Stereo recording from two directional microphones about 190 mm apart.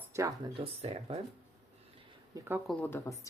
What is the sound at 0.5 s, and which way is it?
Speech, 30° right (ahead or behind).